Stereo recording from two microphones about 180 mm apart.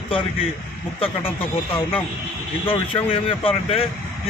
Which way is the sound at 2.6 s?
30° left (ahead or behind).